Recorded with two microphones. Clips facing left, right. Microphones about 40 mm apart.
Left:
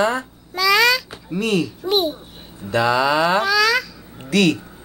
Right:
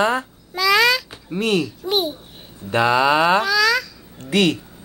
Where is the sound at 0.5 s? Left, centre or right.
Centre.